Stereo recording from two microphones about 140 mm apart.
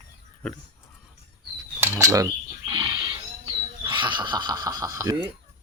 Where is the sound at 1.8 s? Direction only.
20° right (ahead or behind).